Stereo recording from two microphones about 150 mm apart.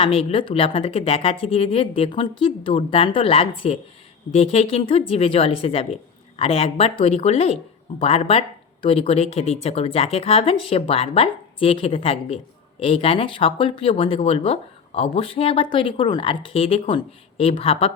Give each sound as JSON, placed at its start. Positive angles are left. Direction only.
{"t": 0.0, "sound": "speech", "side_deg": 40}